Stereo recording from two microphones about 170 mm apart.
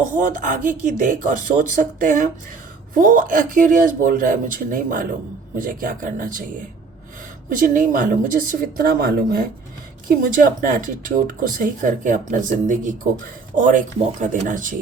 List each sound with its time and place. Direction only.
0.0 s speech: 50° right (ahead or behind)
7.5 s speech: 50° right (ahead or behind)